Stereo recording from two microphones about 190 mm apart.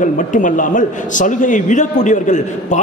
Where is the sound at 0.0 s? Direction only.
45° left (ahead or behind).